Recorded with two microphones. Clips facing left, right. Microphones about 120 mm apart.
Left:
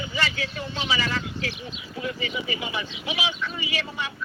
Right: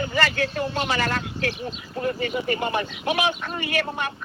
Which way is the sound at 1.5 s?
45° right (ahead or behind).